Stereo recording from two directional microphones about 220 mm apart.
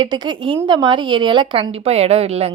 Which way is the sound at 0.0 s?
20° right (ahead or behind).